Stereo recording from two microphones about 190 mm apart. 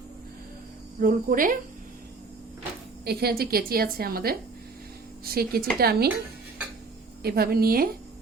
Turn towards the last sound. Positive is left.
turn(degrees=-50)  # may be behind; listen again after turning